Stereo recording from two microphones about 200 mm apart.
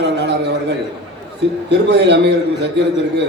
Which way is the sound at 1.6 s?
60° right (ahead or behind).